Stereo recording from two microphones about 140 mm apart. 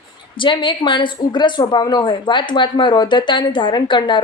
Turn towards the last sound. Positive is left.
turn(degrees=35)  # may be behind; listen again after turning